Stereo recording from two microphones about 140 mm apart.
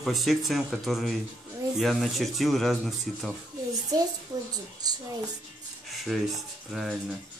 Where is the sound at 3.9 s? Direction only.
25° right (ahead or behind).